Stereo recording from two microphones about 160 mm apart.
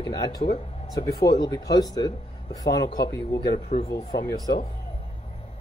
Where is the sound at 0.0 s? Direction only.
25° left (ahead or behind).